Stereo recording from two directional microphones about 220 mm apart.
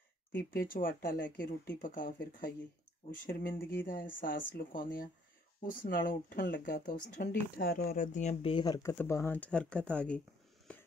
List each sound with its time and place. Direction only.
0.3 s speech: 40° left (ahead or behind)
3.8 s speech: 40° left (ahead or behind); by 10.2 s 5° left (ahead or behind)
10.7 s a sound: 5° left (ahead or behind)